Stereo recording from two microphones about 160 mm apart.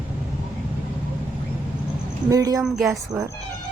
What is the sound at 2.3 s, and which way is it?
Speech, 20° right (ahead or behind).